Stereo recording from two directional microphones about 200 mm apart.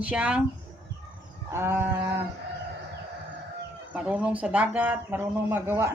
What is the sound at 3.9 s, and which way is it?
A woman's voice, 5° right (ahead or behind).